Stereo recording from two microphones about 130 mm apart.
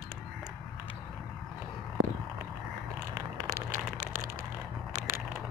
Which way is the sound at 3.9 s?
80° right.